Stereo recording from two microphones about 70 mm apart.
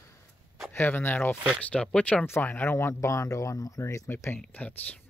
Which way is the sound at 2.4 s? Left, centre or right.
Left.